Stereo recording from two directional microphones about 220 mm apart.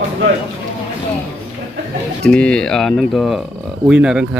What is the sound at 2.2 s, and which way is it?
Speech, 5° left (ahead or behind).